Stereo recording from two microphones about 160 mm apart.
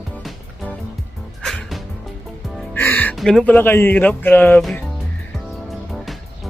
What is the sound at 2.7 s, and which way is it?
Music, 10° left (ahead or behind).